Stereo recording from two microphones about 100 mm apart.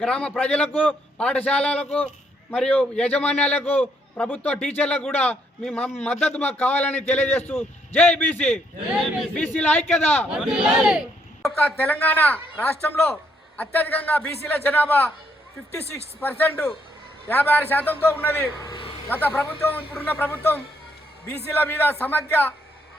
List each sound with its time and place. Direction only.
0.0 s a man's voice: 10° left (ahead or behind)
9.0 s speech: centre (ahead or behind)
9.3 s speech: 15° left (ahead or behind)
10.3 s speech: 5° right (ahead or behind)
11.6 s a man's voice: 15° left (ahead or behind)
16.2 s a man's voice: 20° left (ahead or behind)